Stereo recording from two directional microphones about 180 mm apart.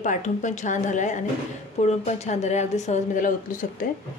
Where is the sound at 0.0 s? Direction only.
45° left (ahead or behind).